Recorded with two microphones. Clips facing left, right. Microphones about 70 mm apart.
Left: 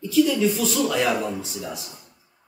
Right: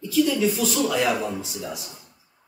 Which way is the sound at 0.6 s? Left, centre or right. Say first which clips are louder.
Even; centre.